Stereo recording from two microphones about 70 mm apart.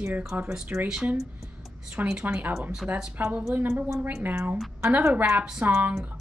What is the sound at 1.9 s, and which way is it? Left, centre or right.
A woman's voice, centre.